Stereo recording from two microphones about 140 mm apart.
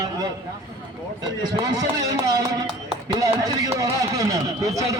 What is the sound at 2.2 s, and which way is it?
A man's voice, 25° right (ahead or behind).